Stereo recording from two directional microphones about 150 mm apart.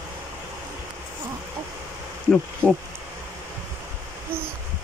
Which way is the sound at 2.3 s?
5° left (ahead or behind).